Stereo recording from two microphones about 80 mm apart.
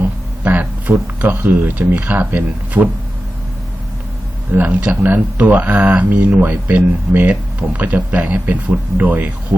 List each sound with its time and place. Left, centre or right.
0.4 s speech: right
4.5 s speech: centre